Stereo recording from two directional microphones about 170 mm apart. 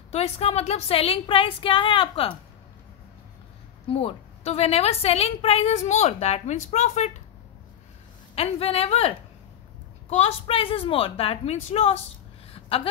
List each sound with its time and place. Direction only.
0.1 s a woman's voice: 40° left (ahead or behind)
3.9 s a woman's voice: 35° left (ahead or behind)
8.4 s a woman's voice: 35° left (ahead or behind)
12.5 s a sound: 35° left (ahead or behind)